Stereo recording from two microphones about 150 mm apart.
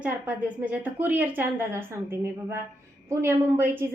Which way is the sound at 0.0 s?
10° right (ahead or behind).